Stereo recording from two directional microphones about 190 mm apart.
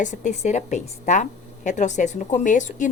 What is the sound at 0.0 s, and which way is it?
A woman's voice, 40° left (ahead or behind).